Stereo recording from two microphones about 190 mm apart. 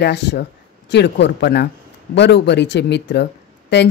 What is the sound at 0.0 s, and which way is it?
Speech, 65° left (ahead or behind).